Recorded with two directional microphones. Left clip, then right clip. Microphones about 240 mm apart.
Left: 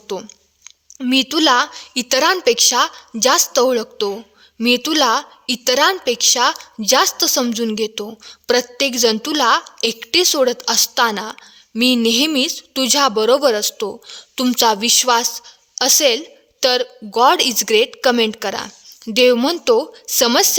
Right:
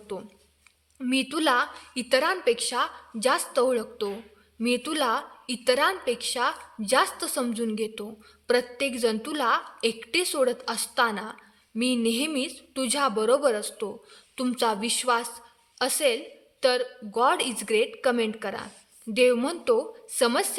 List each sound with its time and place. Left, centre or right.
0.1 s a woman's voice: left